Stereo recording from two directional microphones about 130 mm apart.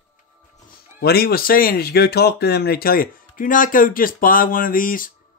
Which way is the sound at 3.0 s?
90° left.